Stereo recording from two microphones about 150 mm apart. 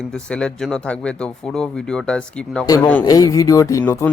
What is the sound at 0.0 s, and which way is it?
Speech, 5° left (ahead or behind).